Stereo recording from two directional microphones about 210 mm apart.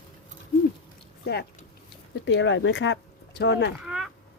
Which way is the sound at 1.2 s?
50° left (ahead or behind).